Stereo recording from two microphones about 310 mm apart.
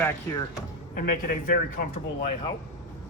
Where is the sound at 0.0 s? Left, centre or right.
Centre.